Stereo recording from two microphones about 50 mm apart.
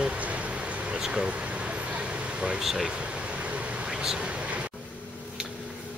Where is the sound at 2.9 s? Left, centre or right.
Right.